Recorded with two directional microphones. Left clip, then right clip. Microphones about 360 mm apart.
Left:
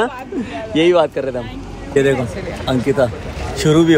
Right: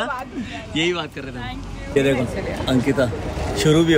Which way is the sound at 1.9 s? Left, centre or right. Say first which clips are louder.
Left 4 dB; centre.